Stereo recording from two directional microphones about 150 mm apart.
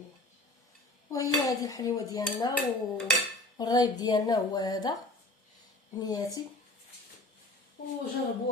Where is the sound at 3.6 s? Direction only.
25° left (ahead or behind).